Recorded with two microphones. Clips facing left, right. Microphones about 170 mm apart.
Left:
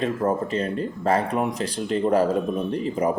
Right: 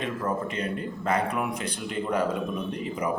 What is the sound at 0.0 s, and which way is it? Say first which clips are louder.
Speech: left 6 dB; 40° left (ahead or behind).